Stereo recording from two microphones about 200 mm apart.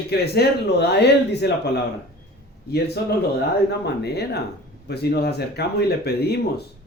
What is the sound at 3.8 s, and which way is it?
A man's voice, 55° left (ahead or behind).